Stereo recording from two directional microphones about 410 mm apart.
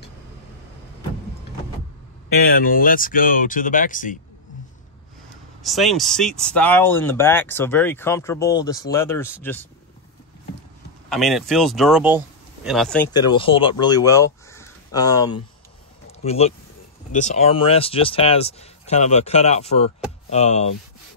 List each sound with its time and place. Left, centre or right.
2.4 s speech: left
5.6 s speech: centre
11.1 s speech: centre